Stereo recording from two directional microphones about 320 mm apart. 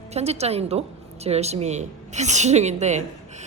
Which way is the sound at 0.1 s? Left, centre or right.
Centre.